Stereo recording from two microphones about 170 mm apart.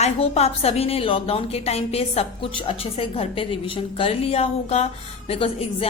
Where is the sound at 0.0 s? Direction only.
40° left (ahead or behind).